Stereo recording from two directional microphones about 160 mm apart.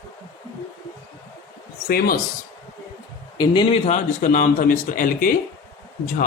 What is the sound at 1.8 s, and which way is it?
Speech, 70° left (ahead or behind).